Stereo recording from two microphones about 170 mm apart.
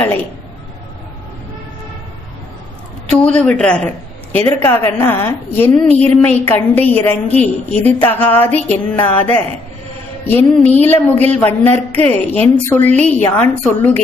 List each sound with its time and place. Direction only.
3.1 s a man's voice: 5° left (ahead or behind)